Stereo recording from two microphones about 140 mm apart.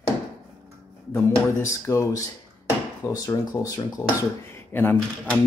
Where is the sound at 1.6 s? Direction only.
20° left (ahead or behind).